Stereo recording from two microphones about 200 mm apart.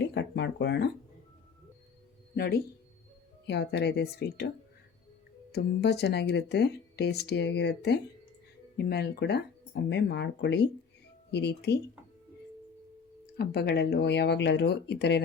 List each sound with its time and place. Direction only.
0.0 s a sound: 60° left (ahead or behind)
2.3 s speech: 50° left (ahead or behind)
5.5 s speech: 55° left (ahead or behind)
13.3 s speech: 50° left (ahead or behind)